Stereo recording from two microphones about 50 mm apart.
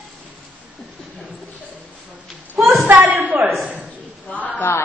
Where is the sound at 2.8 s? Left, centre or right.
Right.